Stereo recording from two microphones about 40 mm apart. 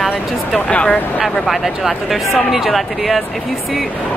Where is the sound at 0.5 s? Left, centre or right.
Left.